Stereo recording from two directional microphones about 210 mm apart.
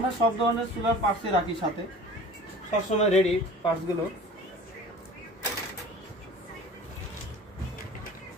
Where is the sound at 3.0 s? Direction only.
30° left (ahead or behind).